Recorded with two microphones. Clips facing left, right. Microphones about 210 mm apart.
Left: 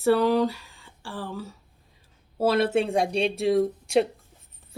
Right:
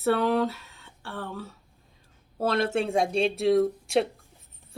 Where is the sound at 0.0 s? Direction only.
Centre (ahead or behind).